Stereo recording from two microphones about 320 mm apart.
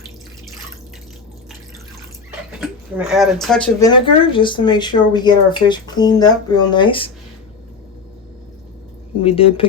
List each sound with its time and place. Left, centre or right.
2.6 s speech: centre
9.2 s speech: centre